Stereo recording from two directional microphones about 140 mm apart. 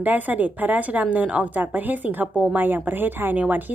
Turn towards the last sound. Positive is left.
turn(degrees=-10)  # may be behind; listen again after turning